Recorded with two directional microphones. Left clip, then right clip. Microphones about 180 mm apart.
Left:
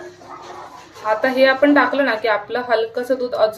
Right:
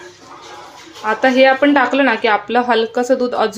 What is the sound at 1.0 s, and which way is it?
A woman's voice, 45° right (ahead or behind).